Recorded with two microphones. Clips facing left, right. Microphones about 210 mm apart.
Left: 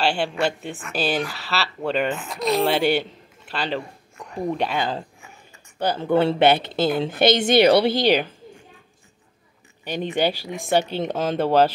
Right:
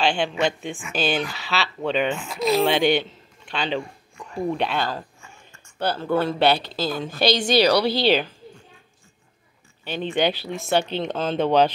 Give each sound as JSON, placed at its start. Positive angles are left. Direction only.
{"t": 0.0, "sound": "speech", "side_deg": 5}
{"t": 0.9, "sound": "speech", "side_deg": 35}
{"t": 1.2, "sound": "a woman's voice", "side_deg": 0}
{"t": 9.8, "sound": "speech", "side_deg": 15}